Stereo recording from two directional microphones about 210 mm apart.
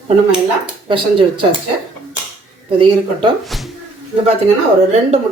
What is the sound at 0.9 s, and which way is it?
Speech, 25° right (ahead or behind).